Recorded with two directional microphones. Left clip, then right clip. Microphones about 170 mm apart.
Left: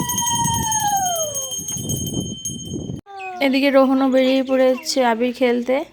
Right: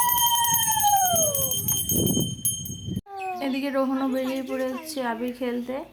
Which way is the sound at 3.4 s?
45° left (ahead or behind).